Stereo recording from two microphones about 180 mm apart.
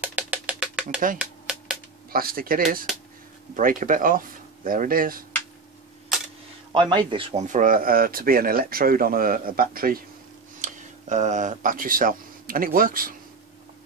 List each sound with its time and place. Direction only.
0.0 s music: 10° right (ahead or behind)
1.1 s a sound: 5° right (ahead or behind)
2.0 s speech: 55° right (ahead or behind)
6.7 s speech: 25° right (ahead or behind); by 9.9 s 55° right (ahead or behind)
10.6 s speech: 40° right (ahead or behind)